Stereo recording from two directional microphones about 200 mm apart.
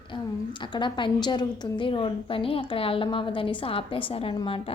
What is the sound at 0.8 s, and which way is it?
A woman's voice, 25° left (ahead or behind).